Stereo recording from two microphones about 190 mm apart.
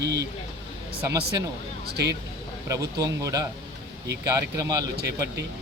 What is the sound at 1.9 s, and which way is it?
Speech, 60° right (ahead or behind).